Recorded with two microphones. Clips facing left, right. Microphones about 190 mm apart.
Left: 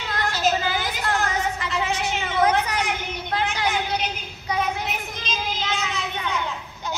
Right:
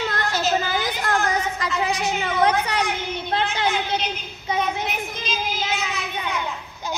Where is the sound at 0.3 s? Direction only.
45° right (ahead or behind).